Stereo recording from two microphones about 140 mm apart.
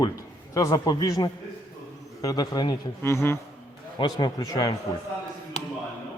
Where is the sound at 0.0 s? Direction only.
25° left (ahead or behind).